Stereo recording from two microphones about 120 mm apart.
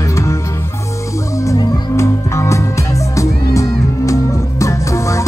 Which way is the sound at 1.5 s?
25° left (ahead or behind).